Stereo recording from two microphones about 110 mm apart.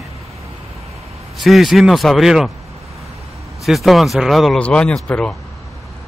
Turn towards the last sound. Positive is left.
turn(degrees=10)  # may be behind; listen again after turning